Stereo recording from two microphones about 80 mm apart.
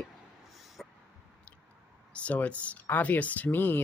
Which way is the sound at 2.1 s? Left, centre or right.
Centre.